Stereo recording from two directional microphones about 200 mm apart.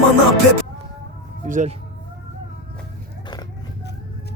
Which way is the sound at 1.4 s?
40° right (ahead or behind).